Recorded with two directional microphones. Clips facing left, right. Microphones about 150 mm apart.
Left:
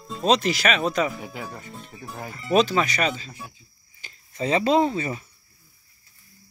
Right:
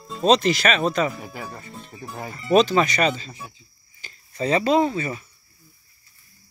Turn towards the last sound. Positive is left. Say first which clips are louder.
# right 1 dB
turn(degrees=20)  # may be behind; listen again after turning